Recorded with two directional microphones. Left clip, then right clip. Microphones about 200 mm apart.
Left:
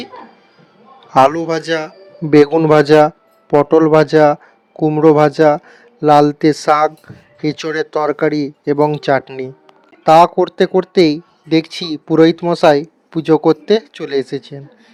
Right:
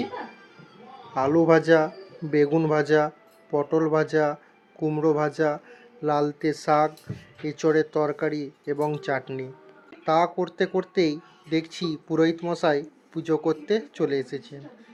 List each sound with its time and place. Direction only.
1.1 s a man's voice: 50° left (ahead or behind)